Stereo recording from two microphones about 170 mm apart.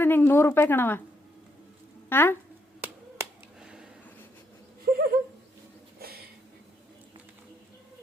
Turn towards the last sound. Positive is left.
turn(degrees=-60)  # may be behind; listen again after turning